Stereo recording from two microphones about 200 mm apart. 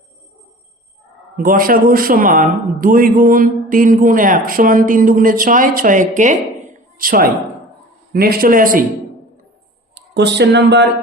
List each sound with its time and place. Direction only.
1.5 s a man's voice: 45° right (ahead or behind)
9.9 s speech: 60° right (ahead or behind)